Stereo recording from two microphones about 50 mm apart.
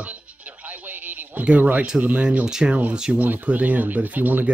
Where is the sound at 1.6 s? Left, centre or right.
Right.